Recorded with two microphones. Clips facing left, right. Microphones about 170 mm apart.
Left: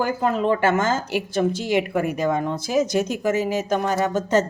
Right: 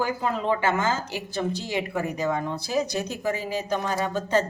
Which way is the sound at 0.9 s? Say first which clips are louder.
Left 7 dB; 75° left (ahead or behind).